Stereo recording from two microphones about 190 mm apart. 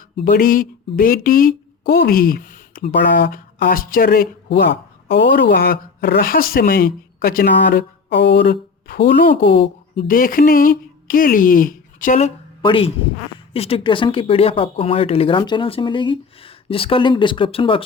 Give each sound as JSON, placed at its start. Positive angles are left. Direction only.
{"t": 0.3, "sound": "speech", "side_deg": 50}
{"t": 12.6, "sound": "speech", "side_deg": 30}